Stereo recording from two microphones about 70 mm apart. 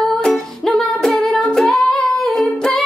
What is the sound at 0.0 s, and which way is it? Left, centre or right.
Music, centre.